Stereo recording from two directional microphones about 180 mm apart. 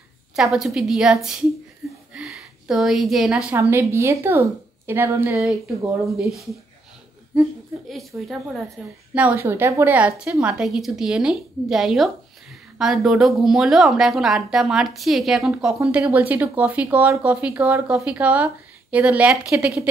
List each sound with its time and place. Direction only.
0.4 s a woman's voice: centre (ahead or behind)
1.8 s a sound: 5° right (ahead or behind)
2.1 s a woman's voice: centre (ahead or behind)
8.3 s a woman's voice: 5° right (ahead or behind)